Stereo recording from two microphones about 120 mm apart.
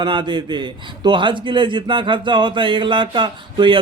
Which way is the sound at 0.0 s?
40° right (ahead or behind).